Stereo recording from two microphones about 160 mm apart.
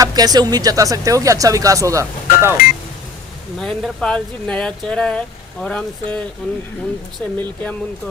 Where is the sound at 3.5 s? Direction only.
Centre (ahead or behind).